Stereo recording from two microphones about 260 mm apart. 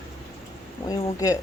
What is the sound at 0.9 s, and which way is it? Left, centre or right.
Speech, centre.